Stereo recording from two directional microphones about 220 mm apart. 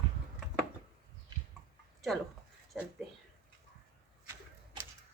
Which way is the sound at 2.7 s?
Centre (ahead or behind).